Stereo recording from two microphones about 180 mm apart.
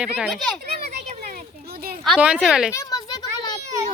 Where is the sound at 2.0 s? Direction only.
5° right (ahead or behind).